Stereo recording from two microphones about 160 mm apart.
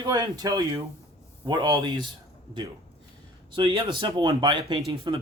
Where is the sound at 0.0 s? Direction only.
25° right (ahead or behind).